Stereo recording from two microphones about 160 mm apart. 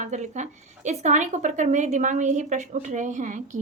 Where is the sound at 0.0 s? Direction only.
45° right (ahead or behind).